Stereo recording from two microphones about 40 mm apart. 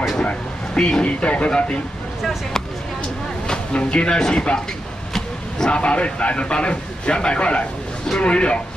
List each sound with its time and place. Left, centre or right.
0.2 s a man's voice: left
3.4 s a man's voice: left
5.7 s a man's voice: left